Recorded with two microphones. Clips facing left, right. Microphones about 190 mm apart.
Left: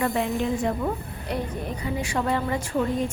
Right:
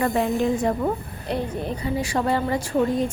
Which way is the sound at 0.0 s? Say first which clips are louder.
Right 3 dB; 40° right (ahead or behind).